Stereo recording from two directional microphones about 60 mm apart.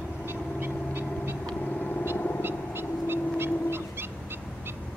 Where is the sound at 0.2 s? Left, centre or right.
Right.